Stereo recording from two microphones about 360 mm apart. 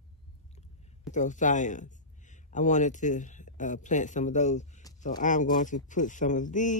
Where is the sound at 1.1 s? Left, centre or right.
Centre.